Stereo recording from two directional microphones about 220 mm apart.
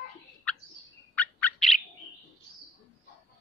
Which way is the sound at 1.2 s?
5° left (ahead or behind).